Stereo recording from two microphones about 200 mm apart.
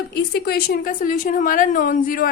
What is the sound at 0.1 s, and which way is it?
A woman's voice, 55° left (ahead or behind).